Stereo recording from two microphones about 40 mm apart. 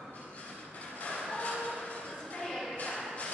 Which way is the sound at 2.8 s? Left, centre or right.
Left.